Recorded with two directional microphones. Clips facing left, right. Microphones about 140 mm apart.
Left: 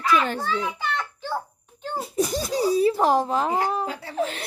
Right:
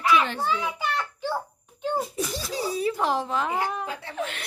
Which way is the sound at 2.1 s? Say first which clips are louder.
Left 6 dB; 45° left (ahead or behind).